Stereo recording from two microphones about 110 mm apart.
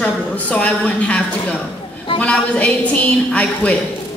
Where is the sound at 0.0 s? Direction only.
10° left (ahead or behind).